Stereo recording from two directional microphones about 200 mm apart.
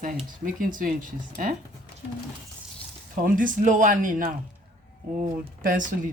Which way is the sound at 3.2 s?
45° right (ahead or behind).